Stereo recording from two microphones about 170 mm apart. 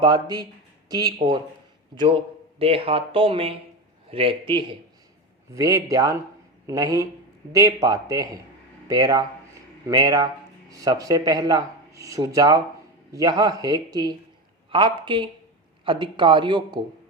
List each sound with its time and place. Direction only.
0.0 s speech: 25° right (ahead or behind)
2.6 s speech: 35° right (ahead or behind)
5.5 s speech: 20° right (ahead or behind)